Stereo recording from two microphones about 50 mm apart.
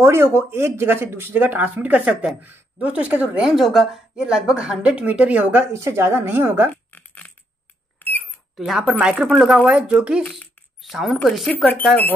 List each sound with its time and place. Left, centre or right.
0.0 s a woman's voice: right
3.3 s speech: centre
4.3 s speech: centre
5.7 s speech: right
6.7 s a sound: left
8.0 s cash register: left
8.5 s speech: centre
9.7 s speech: right
10.8 s a woman's voice: centre
11.5 s speech: left